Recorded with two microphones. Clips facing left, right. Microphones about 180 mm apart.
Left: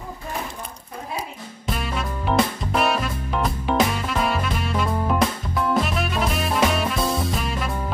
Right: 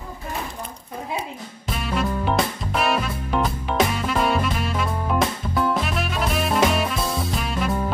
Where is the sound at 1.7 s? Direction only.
Centre (ahead or behind).